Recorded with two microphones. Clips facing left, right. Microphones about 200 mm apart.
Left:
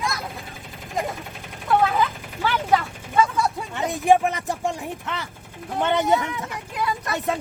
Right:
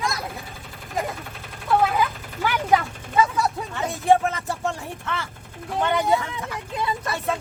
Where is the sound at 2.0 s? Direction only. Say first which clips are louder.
Even; 15° right (ahead or behind).